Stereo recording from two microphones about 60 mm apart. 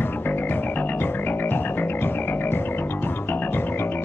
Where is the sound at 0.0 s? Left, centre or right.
Left.